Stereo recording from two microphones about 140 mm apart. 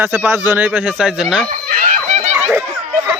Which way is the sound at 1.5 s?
55° right (ahead or behind).